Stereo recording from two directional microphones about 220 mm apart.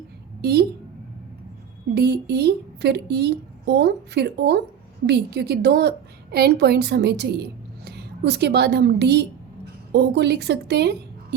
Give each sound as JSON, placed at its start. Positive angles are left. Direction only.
{"t": 0.4, "sound": "a woman's voice", "side_deg": -45}
{"t": 2.0, "sound": "a woman's voice", "side_deg": -50}